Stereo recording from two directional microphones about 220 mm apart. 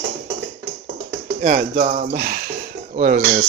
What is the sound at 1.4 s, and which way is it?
Speech, 35° right (ahead or behind).